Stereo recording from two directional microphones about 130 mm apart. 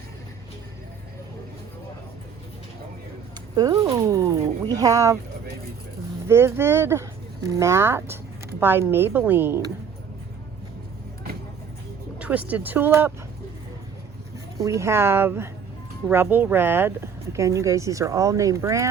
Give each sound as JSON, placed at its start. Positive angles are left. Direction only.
{"t": 3.5, "sound": "speech", "side_deg": -30}
{"t": 6.2, "sound": "speech", "side_deg": -20}
{"t": 12.2, "sound": "speech", "side_deg": -10}
{"t": 14.6, "sound": "speech", "side_deg": -25}